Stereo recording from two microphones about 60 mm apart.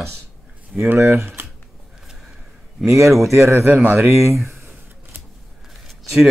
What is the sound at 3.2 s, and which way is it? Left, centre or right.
A man's voice, right.